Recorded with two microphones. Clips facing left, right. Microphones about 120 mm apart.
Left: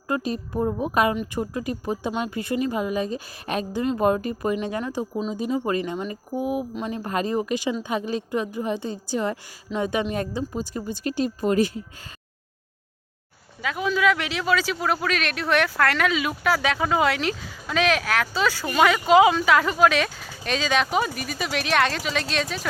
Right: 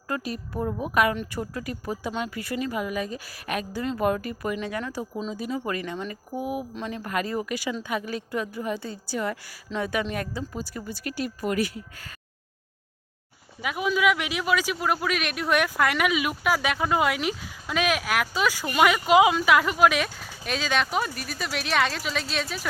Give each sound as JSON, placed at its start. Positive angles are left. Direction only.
{"t": 0.1, "sound": "speech", "side_deg": 25}
{"t": 13.6, "sound": "a man's voice", "side_deg": -15}